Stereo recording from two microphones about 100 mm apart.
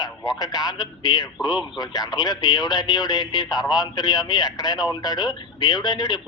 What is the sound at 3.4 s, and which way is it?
Speech, 5° right (ahead or behind).